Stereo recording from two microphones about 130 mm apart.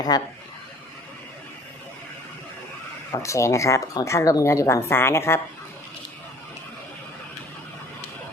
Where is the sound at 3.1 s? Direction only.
25° left (ahead or behind).